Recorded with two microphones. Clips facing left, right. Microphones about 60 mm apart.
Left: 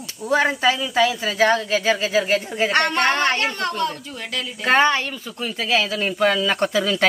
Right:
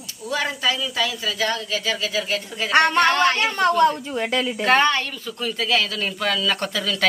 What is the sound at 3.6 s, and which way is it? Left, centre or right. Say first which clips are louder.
Speech: right 7 dB; centre.